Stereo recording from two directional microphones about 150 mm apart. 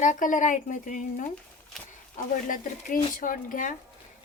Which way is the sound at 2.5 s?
65° left (ahead or behind).